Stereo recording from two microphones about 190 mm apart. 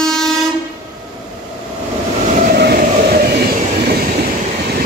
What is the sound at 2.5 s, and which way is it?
Train, 55° right (ahead or behind).